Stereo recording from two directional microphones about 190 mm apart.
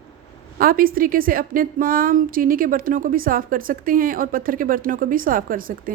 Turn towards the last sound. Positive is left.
turn(degrees=-45)  # may be behind; listen again after turning